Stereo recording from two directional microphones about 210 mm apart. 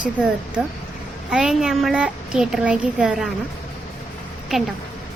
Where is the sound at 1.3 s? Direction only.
Centre (ahead or behind).